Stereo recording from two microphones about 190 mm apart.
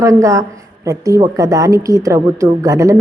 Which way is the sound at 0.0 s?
15° right (ahead or behind).